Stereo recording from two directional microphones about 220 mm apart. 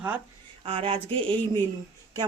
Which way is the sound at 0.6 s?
25° right (ahead or behind).